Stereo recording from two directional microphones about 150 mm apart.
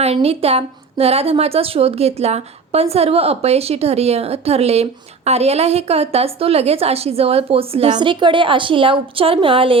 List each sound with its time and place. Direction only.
0.0 s a woman's voice: 40° right (ahead or behind)